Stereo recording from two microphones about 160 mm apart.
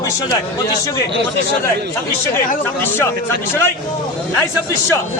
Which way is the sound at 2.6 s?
10° left (ahead or behind).